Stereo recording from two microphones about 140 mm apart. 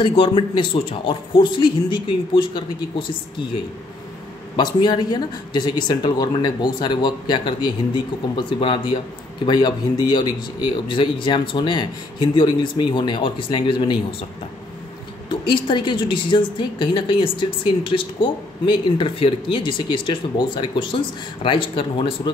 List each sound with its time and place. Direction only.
0.0 s a woman's voice: 40° left (ahead or behind)
4.6 s a woman's voice: 30° left (ahead or behind)
15.2 s a woman's voice: 35° left (ahead or behind)